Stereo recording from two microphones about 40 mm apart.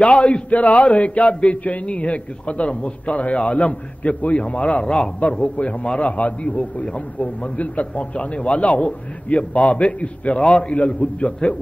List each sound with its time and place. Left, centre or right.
0.0 s a man's voice: left
4.8 s a man's voice: left